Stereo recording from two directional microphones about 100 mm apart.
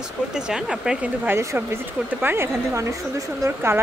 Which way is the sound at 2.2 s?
25° right (ahead or behind).